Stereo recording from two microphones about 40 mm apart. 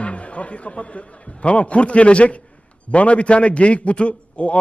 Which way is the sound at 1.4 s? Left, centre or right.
Left.